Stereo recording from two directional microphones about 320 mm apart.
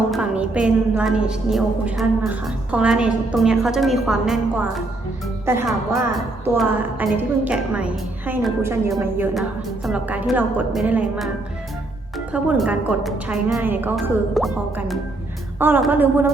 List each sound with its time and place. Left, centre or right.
0.1 s a woman's voice: centre
12.3 s a woman's voice: centre